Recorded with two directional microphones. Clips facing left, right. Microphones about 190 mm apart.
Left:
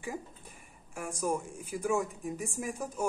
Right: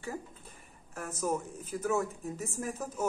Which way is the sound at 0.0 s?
15° left (ahead or behind).